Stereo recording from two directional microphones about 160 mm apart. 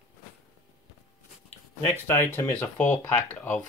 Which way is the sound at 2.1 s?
15° left (ahead or behind).